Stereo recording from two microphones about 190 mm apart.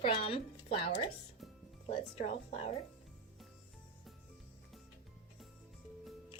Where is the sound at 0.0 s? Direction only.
30° left (ahead or behind).